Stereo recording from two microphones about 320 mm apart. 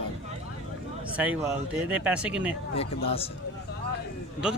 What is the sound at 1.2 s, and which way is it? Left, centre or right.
Speech, centre.